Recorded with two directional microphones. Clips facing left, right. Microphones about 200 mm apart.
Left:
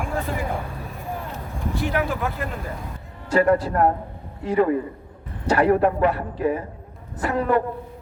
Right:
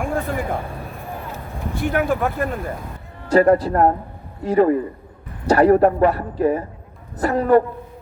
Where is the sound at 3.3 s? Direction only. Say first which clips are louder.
Right 4 dB; 40° right (ahead or behind).